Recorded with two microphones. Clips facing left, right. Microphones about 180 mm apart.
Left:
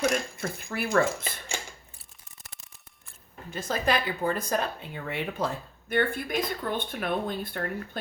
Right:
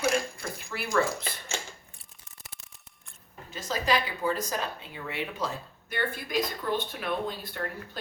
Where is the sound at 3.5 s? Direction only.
55° left (ahead or behind).